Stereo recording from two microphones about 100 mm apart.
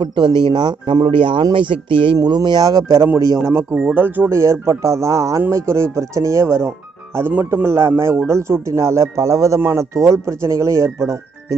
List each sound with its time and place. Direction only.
0.0 s speech: 50° right (ahead or behind)
2.1 s speech: 45° right (ahead or behind)
3.3 s speech: 25° right (ahead or behind)